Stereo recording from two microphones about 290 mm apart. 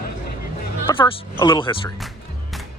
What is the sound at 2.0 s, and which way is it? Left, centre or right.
Music, centre.